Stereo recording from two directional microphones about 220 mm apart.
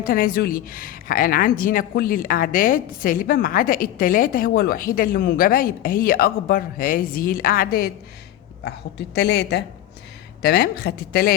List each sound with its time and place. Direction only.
0.0 s a woman's voice: 40° left (ahead or behind)